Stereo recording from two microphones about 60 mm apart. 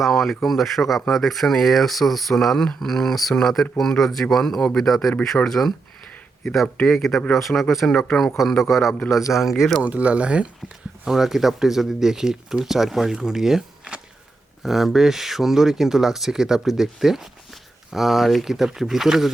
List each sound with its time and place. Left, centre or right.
0.0 s speech: centre
6.8 s speech: centre
9.8 s speech: right
11.0 s speech: centre